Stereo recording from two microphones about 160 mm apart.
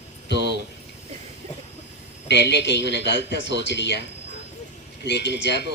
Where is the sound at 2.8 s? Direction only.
90° right.